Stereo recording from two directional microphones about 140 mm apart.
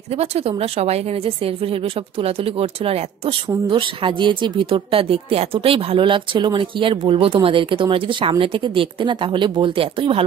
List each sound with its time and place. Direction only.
0.2 s a woman's voice: 45° right (ahead or behind)